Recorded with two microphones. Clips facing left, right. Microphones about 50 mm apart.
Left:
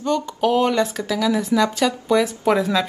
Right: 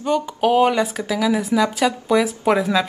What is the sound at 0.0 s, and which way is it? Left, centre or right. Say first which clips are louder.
Speech: right 1 dB; centre.